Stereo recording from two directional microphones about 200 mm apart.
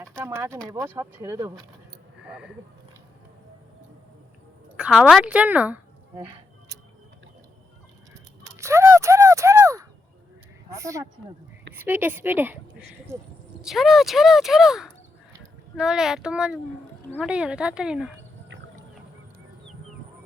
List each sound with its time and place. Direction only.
0.3 s speech: 10° right (ahead or behind)
2.2 s speech: 5° right (ahead or behind)
4.8 s speech: 5° right (ahead or behind)
6.1 s a sound: 20° right (ahead or behind)
8.1 s a sound: 15° right (ahead or behind)
10.7 s speech: 15° right (ahead or behind)